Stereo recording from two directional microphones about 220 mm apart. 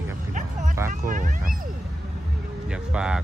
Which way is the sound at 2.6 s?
5° right (ahead or behind).